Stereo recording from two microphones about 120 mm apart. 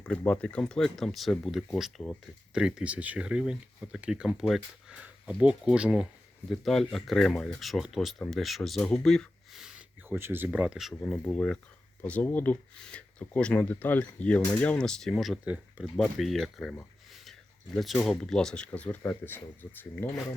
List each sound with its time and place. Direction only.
0.0 s speech: 10° left (ahead or behind); by 6.1 s 10° right (ahead or behind)
6.5 s speech: centre (ahead or behind)
10.1 s speech: 20° right (ahead or behind)
11.0 s speech: 10° left (ahead or behind)
17.7 s speech: centre (ahead or behind); by 20.2 s 20° left (ahead or behind)